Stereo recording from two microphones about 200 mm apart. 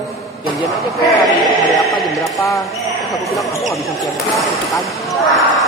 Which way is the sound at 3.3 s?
Centre (ahead or behind).